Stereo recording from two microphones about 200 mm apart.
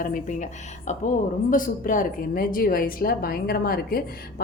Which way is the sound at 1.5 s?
40° left (ahead or behind).